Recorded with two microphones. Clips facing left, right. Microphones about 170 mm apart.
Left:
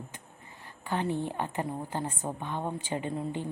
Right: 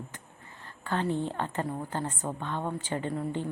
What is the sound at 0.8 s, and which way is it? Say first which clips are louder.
A woman's voice: right 1 dB; 15° left (ahead or behind).